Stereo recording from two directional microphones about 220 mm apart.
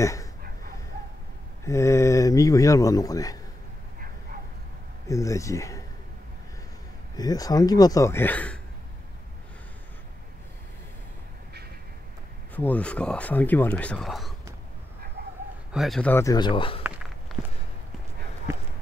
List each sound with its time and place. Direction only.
0.0 s speech: 15° left (ahead or behind)
1.6 s speech: 15° left (ahead or behind)
5.0 s speech: 15° left (ahead or behind)
7.2 s speech: 15° left (ahead or behind)
12.5 s speech: 5° left (ahead or behind)
15.7 s speech: centre (ahead or behind); by 16.8 s 25° left (ahead or behind)
16.8 s walk: 5° right (ahead or behind)